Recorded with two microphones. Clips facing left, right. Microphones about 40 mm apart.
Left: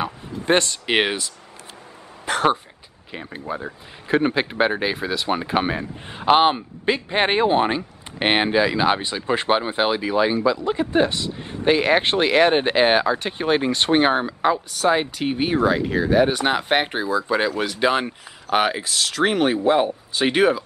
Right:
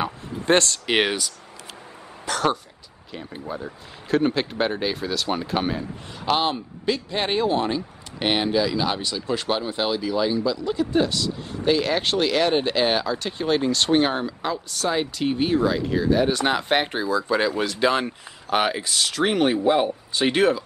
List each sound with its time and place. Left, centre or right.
0.5 s speech: centre
2.2 s a sound: left
3.1 s speech: left
14.7 s speech: centre